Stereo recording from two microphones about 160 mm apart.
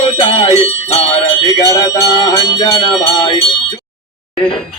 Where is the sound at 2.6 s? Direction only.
35° left (ahead or behind).